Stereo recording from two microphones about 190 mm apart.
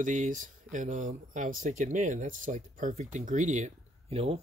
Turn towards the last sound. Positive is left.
turn(degrees=-30)  # may be behind; listen again after turning